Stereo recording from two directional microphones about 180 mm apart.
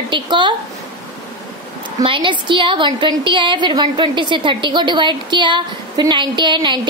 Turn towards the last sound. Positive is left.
turn(degrees=-25)  # may be behind; listen again after turning